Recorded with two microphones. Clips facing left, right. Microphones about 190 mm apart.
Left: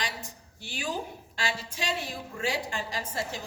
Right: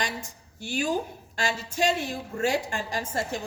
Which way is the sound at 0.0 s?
45° right (ahead or behind).